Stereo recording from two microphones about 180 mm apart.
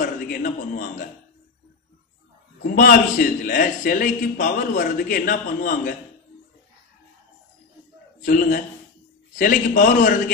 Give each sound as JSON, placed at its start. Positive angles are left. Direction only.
{"t": 0.0, "sound": "a man's voice", "side_deg": 45}
{"t": 2.7, "sound": "a man's voice", "side_deg": 50}
{"t": 8.3, "sound": "a man's voice", "side_deg": 50}